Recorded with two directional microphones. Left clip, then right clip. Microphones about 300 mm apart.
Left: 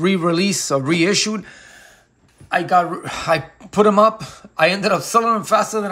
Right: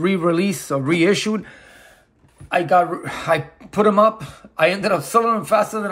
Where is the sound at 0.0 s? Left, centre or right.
Centre.